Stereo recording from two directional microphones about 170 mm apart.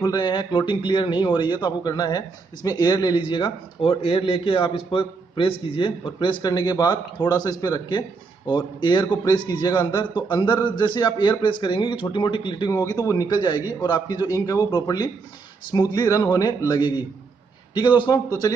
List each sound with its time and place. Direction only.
0.0 s speech: 25° left (ahead or behind)